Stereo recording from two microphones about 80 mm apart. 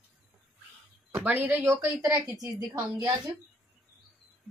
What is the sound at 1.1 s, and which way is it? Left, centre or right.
Speech, right.